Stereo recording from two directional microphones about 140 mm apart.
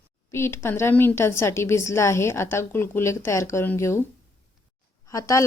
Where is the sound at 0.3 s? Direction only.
20° left (ahead or behind).